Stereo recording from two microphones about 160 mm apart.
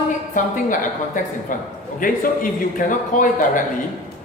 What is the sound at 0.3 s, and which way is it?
A man's voice, 55° left (ahead or behind).